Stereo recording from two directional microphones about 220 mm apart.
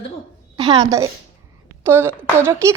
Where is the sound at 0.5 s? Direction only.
20° right (ahead or behind).